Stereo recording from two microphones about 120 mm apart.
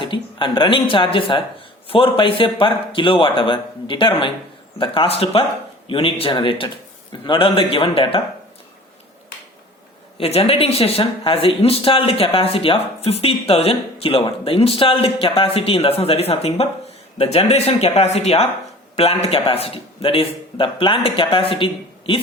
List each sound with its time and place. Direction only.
0.0 s speech: 45° left (ahead or behind)
10.2 s speech: 55° left (ahead or behind)